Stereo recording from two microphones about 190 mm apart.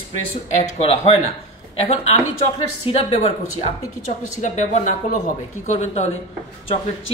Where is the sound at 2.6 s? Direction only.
30° left (ahead or behind).